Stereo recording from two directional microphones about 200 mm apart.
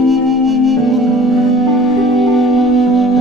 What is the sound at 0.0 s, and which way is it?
Music, centre (ahead or behind).